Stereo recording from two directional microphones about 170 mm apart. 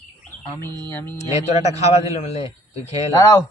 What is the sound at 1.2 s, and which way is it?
Speech, 40° left (ahead or behind).